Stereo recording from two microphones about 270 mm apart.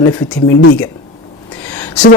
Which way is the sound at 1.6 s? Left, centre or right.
Centre.